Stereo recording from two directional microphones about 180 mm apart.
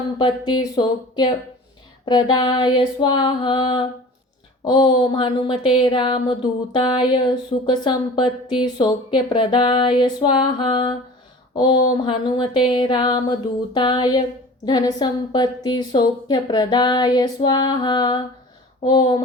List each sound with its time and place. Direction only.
0.2 s a woman's voice: 25° left (ahead or behind)